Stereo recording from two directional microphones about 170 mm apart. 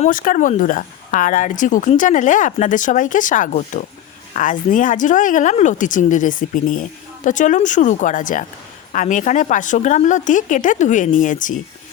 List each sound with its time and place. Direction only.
0.0 s speech: 55° left (ahead or behind)